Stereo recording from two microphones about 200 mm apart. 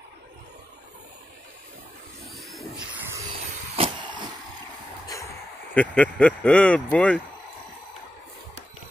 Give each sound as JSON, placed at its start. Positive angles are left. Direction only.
{"t": 2.2, "sound": "vehicle", "side_deg": 0}
{"t": 3.7, "sound": "vehicle", "side_deg": -25}
{"t": 5.0, "sound": "a sound", "side_deg": 15}
{"t": 5.8, "sound": "speech", "side_deg": 5}